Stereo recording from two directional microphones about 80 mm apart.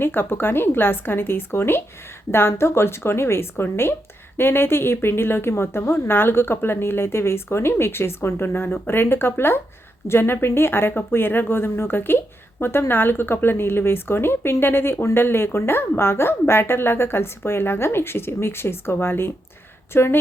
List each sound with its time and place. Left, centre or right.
0.0 s speech: left